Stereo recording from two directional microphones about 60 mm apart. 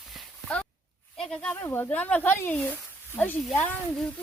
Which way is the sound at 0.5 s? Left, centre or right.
Centre.